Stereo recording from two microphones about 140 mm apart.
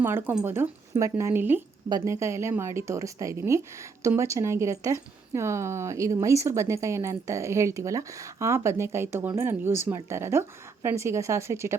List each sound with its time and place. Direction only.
0.0 s a woman's voice: 15° right (ahead or behind)